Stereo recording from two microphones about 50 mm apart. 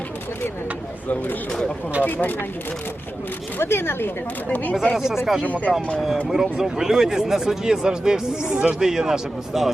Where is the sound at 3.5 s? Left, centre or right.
Left.